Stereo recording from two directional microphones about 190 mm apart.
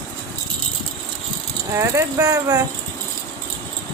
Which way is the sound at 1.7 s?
15° right (ahead or behind).